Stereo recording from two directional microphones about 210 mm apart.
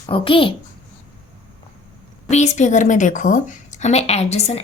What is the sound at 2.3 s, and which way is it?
A woman's voice, 35° left (ahead or behind).